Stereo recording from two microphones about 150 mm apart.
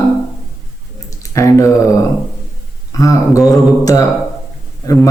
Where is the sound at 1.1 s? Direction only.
20° left (ahead or behind).